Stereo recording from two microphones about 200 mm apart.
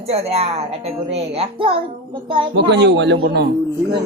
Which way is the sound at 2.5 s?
60° right (ahead or behind).